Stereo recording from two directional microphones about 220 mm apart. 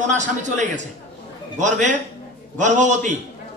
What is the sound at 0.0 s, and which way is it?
A man's voice, 35° right (ahead or behind).